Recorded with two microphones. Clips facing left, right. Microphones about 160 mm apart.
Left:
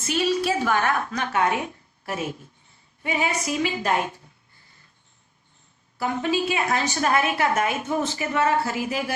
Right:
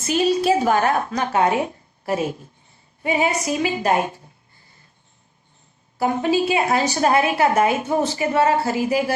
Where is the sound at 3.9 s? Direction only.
20° right (ahead or behind).